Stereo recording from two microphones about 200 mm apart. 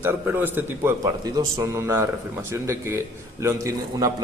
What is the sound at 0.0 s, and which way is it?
A man's voice, 10° right (ahead or behind).